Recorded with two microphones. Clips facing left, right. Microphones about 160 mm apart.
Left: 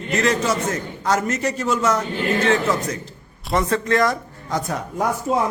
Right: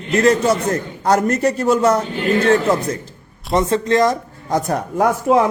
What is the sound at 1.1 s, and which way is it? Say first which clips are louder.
Speech: right 7 dB; 55° right (ahead or behind).